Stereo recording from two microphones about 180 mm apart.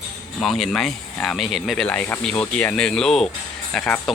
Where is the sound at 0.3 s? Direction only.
Centre (ahead or behind).